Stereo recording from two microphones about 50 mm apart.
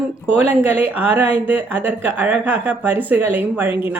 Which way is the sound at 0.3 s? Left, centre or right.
Right.